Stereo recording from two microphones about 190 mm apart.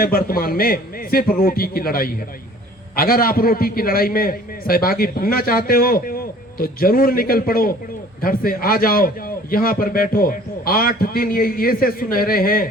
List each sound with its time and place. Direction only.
0.0 s a man's voice: 50° left (ahead or behind)